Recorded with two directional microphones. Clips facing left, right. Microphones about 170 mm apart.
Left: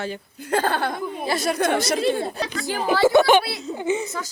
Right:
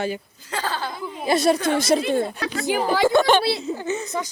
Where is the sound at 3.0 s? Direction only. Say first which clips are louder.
Left 2 dB; 15° left (ahead or behind).